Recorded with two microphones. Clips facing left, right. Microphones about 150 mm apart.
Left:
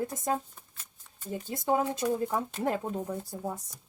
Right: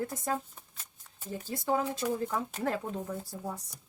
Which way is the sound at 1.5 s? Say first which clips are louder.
Left 2 dB; 20° left (ahead or behind).